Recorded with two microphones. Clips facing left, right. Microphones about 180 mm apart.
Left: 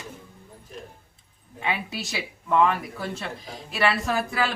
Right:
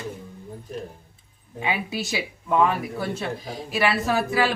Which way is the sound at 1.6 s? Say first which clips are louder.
Right 3 dB; 5° right (ahead or behind).